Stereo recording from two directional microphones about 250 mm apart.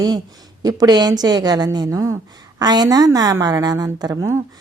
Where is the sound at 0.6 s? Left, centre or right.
Centre.